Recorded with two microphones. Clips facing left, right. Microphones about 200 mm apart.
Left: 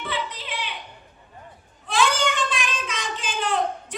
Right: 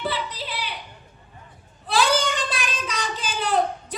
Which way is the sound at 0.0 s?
35° right (ahead or behind).